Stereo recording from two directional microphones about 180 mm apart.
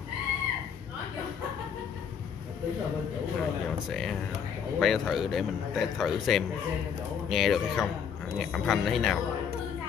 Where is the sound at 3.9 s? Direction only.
Centre (ahead or behind).